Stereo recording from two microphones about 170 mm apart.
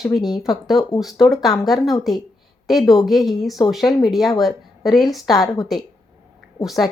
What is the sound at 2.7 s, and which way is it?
Speech, centre (ahead or behind).